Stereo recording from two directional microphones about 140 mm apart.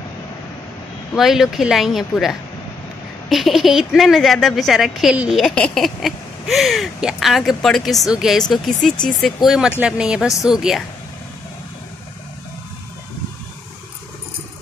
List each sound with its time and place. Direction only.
1.1 s a woman's voice: centre (ahead or behind)